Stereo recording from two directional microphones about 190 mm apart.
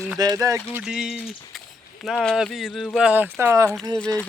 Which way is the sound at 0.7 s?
5° right (ahead or behind).